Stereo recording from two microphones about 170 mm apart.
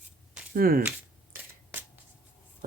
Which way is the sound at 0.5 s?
60° right (ahead or behind).